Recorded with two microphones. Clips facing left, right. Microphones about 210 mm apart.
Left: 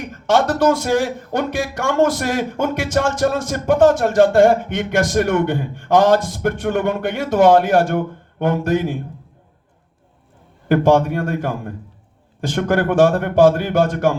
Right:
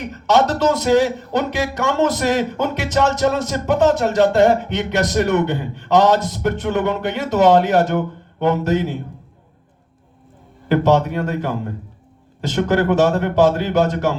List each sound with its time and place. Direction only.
0.4 s a man's voice: 50° left (ahead or behind)
10.7 s a man's voice: 50° left (ahead or behind)